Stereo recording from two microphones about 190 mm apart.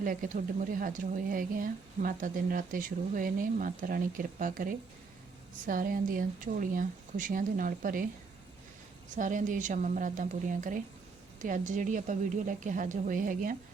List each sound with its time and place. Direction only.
0.0 s speech: 45° right (ahead or behind)
9.1 s speech: 45° right (ahead or behind)